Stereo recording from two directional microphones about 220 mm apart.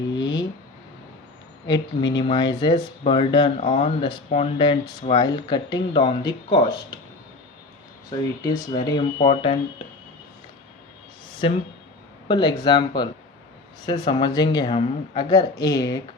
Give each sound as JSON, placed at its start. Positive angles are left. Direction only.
{"t": 0.2, "sound": "a sound", "side_deg": 20}
{"t": 1.6, "sound": "speech", "side_deg": 20}
{"t": 8.1, "sound": "speech", "side_deg": 20}
{"t": 11.4, "sound": "speech", "side_deg": 25}